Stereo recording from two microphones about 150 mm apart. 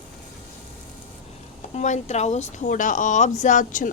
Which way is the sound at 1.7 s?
50° left (ahead or behind).